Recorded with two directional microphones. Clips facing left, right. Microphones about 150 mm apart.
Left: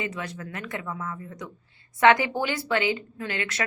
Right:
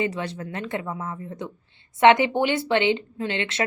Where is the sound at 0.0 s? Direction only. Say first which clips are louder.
Right 6 dB; 30° right (ahead or behind).